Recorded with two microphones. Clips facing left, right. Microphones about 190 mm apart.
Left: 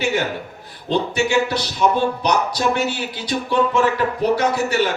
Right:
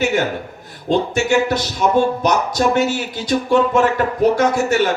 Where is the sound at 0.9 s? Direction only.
45° right (ahead or behind).